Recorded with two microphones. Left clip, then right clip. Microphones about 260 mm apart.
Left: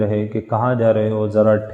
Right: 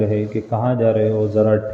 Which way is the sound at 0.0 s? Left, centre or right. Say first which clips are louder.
Even; left.